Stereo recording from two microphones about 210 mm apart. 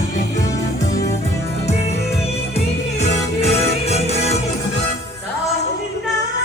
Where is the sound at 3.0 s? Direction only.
30° left (ahead or behind).